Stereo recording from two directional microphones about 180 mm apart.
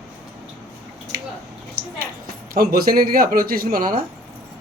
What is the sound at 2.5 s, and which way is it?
Speech, 55° right (ahead or behind).